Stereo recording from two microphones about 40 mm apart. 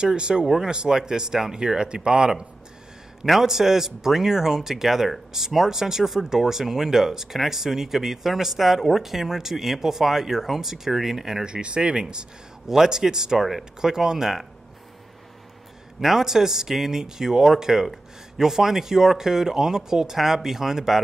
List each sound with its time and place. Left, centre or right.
0.0 s speech: right
3.3 s speech: centre
11.4 s speech: right
13.4 s speech: centre
13.7 s speech: centre
16.0 s speech: centre